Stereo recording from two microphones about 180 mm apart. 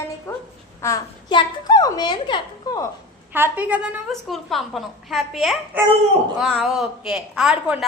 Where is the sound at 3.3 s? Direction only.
10° right (ahead or behind).